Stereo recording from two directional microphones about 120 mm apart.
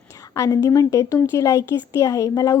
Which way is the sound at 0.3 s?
30° left (ahead or behind).